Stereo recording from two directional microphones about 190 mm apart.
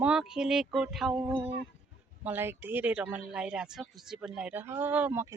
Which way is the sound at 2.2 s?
10° right (ahead or behind).